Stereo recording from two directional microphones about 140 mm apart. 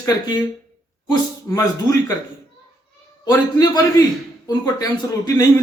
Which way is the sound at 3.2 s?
25° left (ahead or behind).